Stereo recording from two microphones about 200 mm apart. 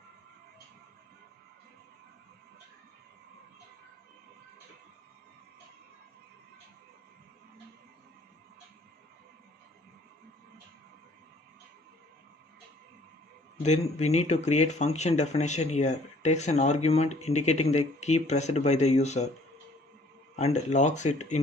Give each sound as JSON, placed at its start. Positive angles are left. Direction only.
{"t": 13.6, "sound": "speech", "side_deg": 35}
{"t": 20.3, "sound": "speech", "side_deg": 35}